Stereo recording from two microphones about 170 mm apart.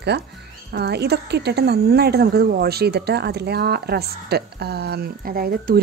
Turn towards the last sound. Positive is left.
turn(degrees=-60)  # may be behind; listen again after turning